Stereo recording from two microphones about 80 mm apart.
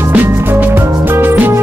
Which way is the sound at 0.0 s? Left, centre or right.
Right.